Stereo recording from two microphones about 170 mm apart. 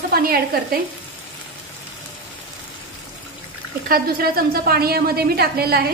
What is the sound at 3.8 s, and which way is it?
A woman's voice, 60° right (ahead or behind).